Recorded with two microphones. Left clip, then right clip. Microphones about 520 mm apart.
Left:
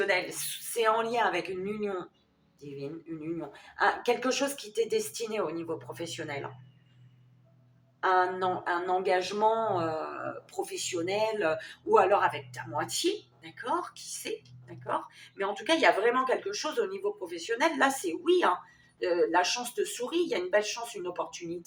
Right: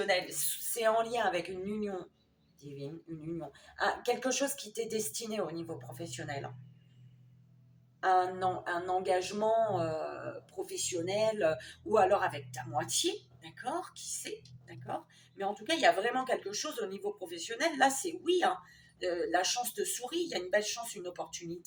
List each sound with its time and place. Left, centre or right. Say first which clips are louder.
0.0 s a woman's voice: left 3 dB; right
8.0 s speech: left 3 dB; right
15.4 s speech: left 4 dB; right